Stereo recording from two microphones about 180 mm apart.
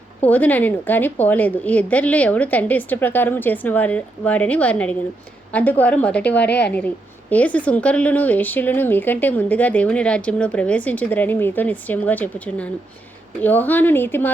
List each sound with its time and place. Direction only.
0.3 s a woman's voice: 10° left (ahead or behind)
6.4 s a woman's voice: 70° left (ahead or behind)
6.7 s a woman's voice: 10° left (ahead or behind)